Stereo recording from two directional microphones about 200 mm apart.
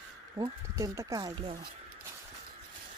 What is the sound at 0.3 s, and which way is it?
Speech, 15° right (ahead or behind).